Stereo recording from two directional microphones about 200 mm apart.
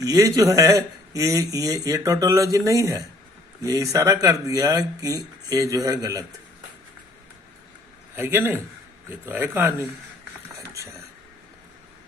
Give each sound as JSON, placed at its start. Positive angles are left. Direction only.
{"t": 0.0, "sound": "a man's voice", "side_deg": -15}
{"t": 8.1, "sound": "a man's voice", "side_deg": -10}
{"t": 10.6, "sound": "a sound", "side_deg": -15}